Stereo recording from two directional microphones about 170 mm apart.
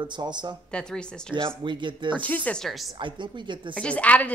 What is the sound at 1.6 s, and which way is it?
Speech, 30° right (ahead or behind).